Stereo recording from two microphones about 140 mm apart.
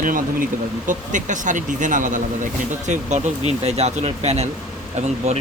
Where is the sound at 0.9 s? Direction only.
65° right (ahead or behind).